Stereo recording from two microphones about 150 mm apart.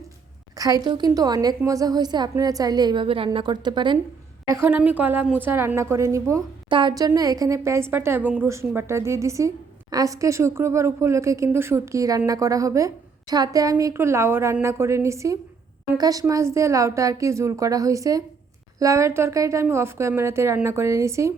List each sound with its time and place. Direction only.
0.5 s a woman's voice: 25° right (ahead or behind)
4.4 s a woman's voice: 15° right (ahead or behind)
6.7 s a woman's voice: 35° right (ahead or behind)